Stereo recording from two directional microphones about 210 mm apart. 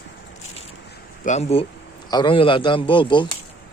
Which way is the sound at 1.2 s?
30° left (ahead or behind).